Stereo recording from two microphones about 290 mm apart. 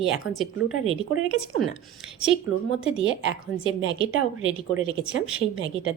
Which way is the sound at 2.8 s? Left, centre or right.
Right.